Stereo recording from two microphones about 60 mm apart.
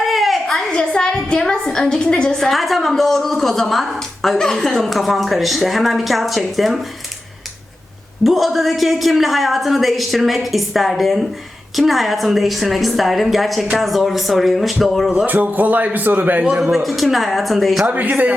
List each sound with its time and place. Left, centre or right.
0.0 s a sound: centre
0.7 s a woman's voice: centre
2.5 s a woman's voice: centre
8.2 s a woman's voice: centre
15.3 s a man's voice: right
16.7 s a woman's voice: centre
17.9 s a man's voice: right